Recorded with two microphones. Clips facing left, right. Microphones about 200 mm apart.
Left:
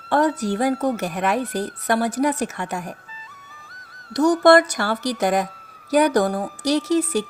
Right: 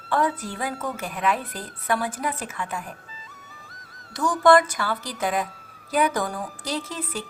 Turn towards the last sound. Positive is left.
turn(degrees=75)  # may be behind; listen again after turning